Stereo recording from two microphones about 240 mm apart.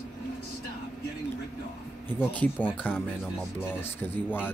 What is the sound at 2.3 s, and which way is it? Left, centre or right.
Speech, centre.